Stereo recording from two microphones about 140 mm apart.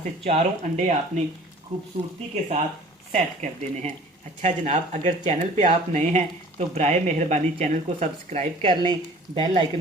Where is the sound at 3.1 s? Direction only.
55° right (ahead or behind).